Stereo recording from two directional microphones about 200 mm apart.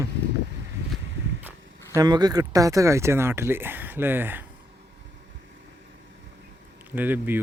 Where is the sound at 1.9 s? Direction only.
20° right (ahead or behind).